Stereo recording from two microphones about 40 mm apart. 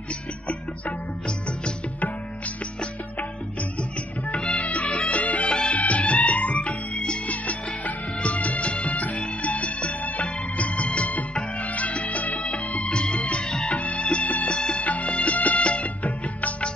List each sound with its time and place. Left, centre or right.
4.3 s music of bollywood: left
4.6 s music: left
5.5 s music: left
5.8 s music: left
14.5 s music: left
14.8 s music of bollywood: left